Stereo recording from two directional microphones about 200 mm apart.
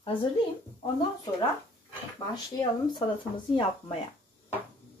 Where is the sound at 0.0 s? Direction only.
25° left (ahead or behind).